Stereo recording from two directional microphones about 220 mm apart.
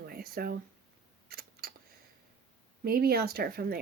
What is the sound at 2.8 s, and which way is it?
Speech, 45° right (ahead or behind).